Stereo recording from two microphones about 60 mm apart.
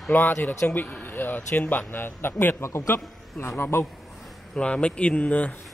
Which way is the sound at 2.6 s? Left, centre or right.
Left.